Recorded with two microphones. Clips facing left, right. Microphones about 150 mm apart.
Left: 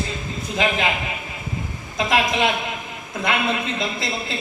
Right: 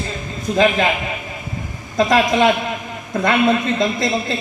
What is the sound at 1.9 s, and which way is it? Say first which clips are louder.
A woman's voice: right 6 dB; 40° right (ahead or behind).